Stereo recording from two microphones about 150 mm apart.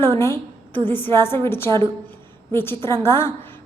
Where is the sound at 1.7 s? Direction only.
30° right (ahead or behind).